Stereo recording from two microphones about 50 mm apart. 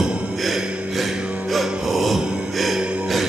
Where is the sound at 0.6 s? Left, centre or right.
Right.